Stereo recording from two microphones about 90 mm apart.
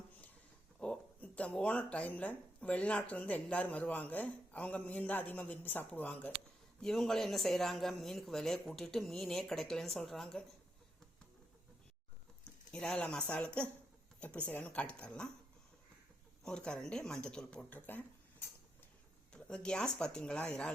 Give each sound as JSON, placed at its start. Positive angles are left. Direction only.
{"t": 0.8, "sound": "speech", "side_deg": 15}
{"t": 6.8, "sound": "speech", "side_deg": 5}
{"t": 12.7, "sound": "speech", "side_deg": 10}
{"t": 16.4, "sound": "speech", "side_deg": 10}
{"t": 19.3, "sound": "speech", "side_deg": 10}